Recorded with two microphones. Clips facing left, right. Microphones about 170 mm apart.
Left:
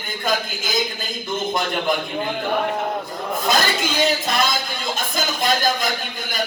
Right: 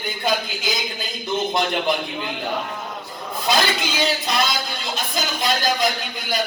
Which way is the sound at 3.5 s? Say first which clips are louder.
Right 1 dB; 45° left (ahead or behind).